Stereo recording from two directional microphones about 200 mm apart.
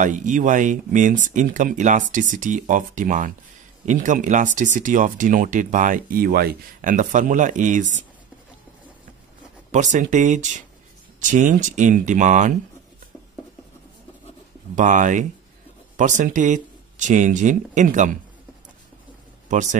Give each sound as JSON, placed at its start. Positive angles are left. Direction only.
{"t": 0.0, "sound": "speech", "side_deg": -40}
{"t": 9.7, "sound": "speech", "side_deg": -35}
{"t": 14.8, "sound": "speech", "side_deg": -40}